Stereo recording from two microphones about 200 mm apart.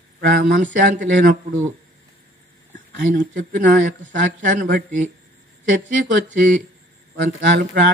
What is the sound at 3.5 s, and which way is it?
Speech, 40° right (ahead or behind).